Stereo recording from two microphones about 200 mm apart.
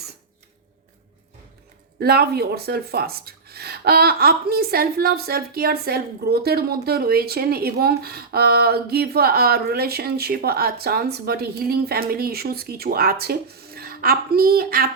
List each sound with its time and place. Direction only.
2.0 s speech: 50° right (ahead or behind)